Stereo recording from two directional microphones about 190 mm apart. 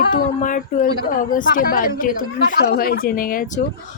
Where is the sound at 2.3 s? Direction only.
60° left (ahead or behind).